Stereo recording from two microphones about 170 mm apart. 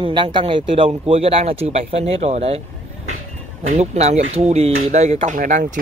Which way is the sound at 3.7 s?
40° right (ahead or behind).